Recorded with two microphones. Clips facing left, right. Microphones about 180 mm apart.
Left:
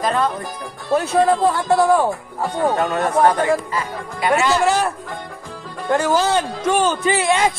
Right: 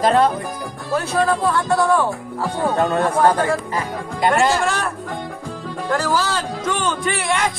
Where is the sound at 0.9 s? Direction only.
25° left (ahead or behind).